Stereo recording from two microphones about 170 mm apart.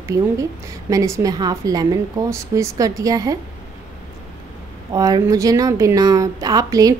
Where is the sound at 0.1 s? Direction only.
20° right (ahead or behind).